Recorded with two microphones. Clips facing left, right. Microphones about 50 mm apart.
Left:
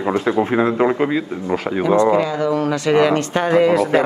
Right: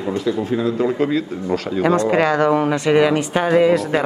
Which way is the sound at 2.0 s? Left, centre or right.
Right.